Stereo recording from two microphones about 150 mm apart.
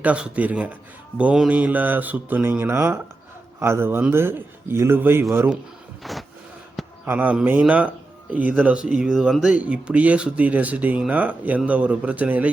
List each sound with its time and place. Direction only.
0.0 s speech: 10° right (ahead or behind)
6.0 s a sound: centre (ahead or behind)
7.0 s speech: 10° right (ahead or behind)